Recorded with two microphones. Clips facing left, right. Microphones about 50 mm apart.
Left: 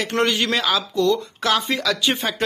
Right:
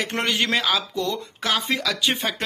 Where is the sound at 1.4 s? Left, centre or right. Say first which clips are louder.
Left 3 dB; centre.